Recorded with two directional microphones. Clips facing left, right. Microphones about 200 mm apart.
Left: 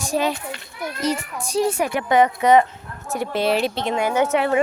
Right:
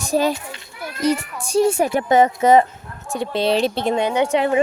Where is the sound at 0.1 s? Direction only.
40° right (ahead or behind).